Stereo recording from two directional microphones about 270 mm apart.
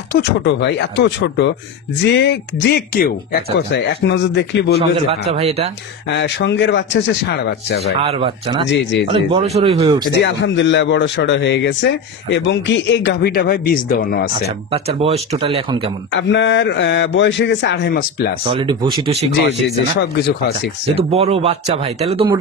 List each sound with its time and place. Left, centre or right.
0.2 s speech: left
5.3 s speech: right
6.0 s speech: left
8.0 s speech: right
8.6 s speech: left
9.1 s speech: right
10.1 s speech: left
14.7 s speech: right
16.1 s speech: left
18.5 s speech: centre
20.0 s speech: left
20.9 s speech: right